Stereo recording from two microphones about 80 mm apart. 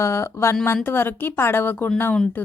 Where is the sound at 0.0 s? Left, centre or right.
Left.